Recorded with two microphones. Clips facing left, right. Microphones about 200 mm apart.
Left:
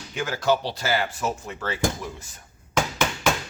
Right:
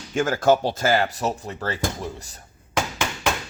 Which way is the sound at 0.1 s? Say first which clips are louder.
Right 5 dB; 45° right (ahead or behind).